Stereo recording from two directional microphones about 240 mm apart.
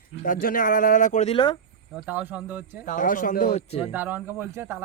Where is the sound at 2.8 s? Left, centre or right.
Left.